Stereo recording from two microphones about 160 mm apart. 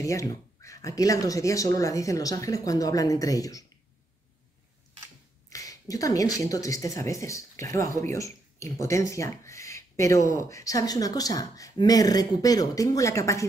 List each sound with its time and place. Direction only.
0.0 s speech: 20° left (ahead or behind)
5.5 s a sound: 20° left (ahead or behind)
6.4 s speech: 20° left (ahead or behind)